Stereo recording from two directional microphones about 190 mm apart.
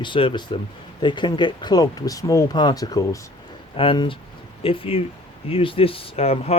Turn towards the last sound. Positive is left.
turn(degrees=35)  # may be behind; listen again after turning